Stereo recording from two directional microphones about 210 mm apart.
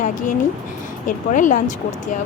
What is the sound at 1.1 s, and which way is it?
A woman's voice, 35° left (ahead or behind).